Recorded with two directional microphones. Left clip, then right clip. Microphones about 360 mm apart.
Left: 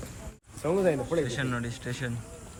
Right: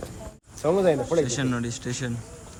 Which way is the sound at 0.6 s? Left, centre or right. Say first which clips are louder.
Right 5 dB; right.